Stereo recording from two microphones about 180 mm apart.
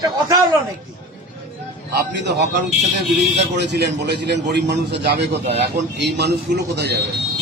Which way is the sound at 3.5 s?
70° right (ahead or behind).